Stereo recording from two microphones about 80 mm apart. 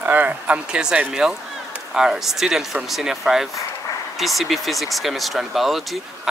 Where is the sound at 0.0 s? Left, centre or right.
Right.